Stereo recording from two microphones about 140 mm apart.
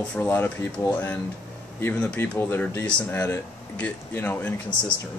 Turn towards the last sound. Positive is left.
turn(degrees=10)  # may be behind; listen again after turning